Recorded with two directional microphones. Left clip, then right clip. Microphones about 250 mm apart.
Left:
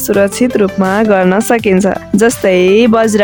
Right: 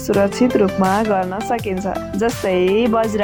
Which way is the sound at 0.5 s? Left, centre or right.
Left.